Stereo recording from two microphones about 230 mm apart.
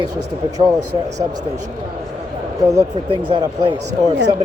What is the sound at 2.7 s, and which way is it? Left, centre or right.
Speech, centre.